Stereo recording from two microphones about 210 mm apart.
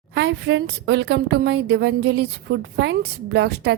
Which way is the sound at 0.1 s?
55° right (ahead or behind).